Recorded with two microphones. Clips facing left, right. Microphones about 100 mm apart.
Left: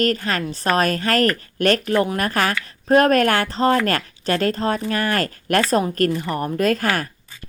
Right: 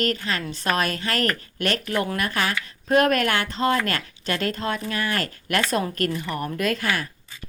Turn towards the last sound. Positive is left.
turn(degrees=45)  # may be behind; listen again after turning